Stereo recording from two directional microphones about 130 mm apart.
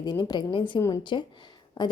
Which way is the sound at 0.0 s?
30° left (ahead or behind).